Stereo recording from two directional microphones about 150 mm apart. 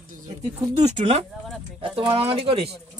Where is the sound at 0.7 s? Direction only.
45° right (ahead or behind).